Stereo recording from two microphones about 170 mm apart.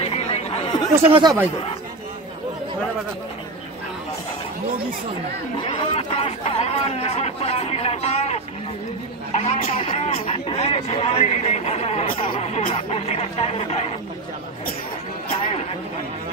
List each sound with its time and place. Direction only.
0.2 s chatter: 40° left (ahead or behind)
1.0 s speech: 30° right (ahead or behind)
5.6 s speech: 30° left (ahead or behind)